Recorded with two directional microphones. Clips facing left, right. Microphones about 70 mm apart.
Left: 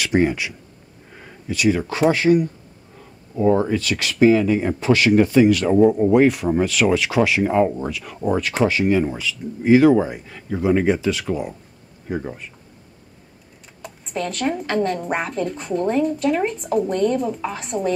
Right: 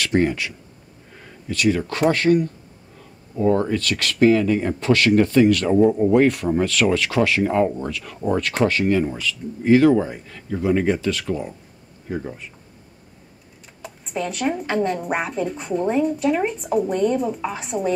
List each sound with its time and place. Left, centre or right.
0.0 s speech: centre
13.8 s speech: centre